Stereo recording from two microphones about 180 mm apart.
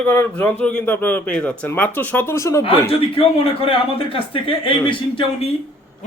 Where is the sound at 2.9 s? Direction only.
30° left (ahead or behind).